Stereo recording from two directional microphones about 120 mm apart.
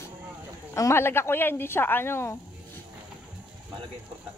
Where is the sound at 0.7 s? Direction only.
25° left (ahead or behind).